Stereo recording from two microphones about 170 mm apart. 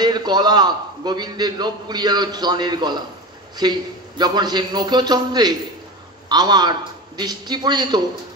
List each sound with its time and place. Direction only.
0.0 s a man's voice: 25° right (ahead or behind)